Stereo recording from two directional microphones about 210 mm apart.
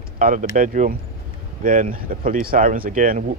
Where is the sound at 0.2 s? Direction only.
40° right (ahead or behind).